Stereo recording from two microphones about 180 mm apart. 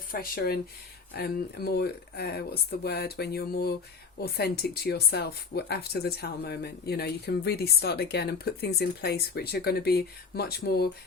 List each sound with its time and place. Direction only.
0.1 s speech: 55° left (ahead or behind)